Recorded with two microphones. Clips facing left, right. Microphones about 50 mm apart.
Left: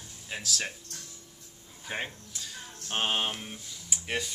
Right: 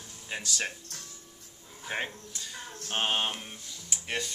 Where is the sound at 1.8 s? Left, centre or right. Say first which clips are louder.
Right 2 dB; centre.